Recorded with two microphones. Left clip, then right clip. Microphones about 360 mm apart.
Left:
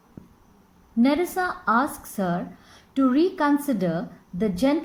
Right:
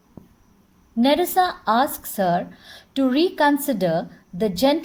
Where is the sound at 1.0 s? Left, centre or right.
Right.